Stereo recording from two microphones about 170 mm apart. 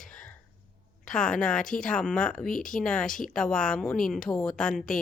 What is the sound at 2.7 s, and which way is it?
A woman's voice, 5° left (ahead or behind).